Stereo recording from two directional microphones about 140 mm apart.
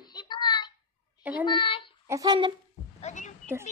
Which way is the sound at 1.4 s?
35° left (ahead or behind).